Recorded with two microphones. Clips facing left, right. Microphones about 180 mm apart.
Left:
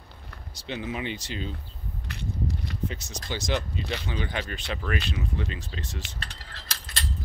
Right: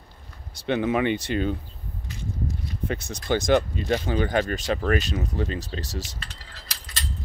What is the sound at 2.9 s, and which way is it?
Speech, 55° right (ahead or behind).